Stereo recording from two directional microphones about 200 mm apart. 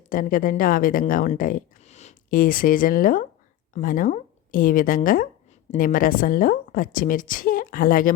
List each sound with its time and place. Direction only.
0.1 s speech: 45° left (ahead or behind)